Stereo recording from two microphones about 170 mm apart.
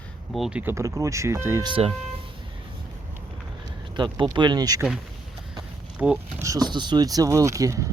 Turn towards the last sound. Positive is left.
turn(degrees=-20)  # may be behind; listen again after turning